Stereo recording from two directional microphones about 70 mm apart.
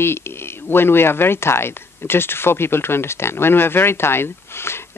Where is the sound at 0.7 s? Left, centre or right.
Left.